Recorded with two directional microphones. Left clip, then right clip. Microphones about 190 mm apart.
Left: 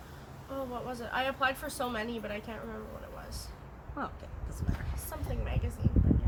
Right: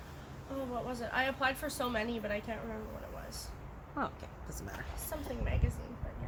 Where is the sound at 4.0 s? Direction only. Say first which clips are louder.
Right 1 dB; 25° right (ahead or behind).